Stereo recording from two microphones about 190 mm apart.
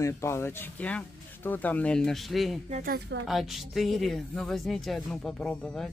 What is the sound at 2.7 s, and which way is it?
Speech, 45° right (ahead or behind).